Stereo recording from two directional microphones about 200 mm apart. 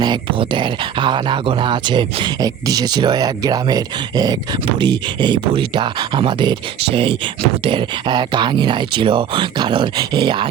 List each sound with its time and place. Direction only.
0.0 s speech: 25° right (ahead or behind)